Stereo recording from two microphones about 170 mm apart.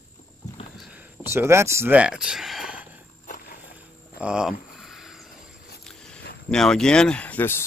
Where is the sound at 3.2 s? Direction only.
50° left (ahead or behind).